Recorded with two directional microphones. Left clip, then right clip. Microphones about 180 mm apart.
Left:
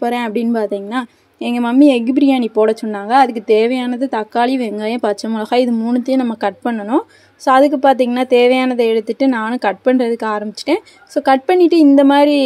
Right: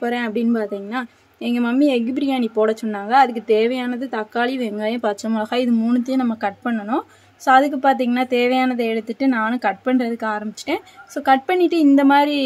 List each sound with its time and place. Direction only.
0.0 s speech: 30° left (ahead or behind)